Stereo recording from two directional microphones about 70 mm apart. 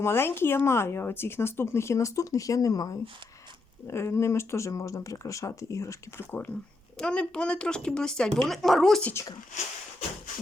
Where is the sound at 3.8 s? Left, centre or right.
Left.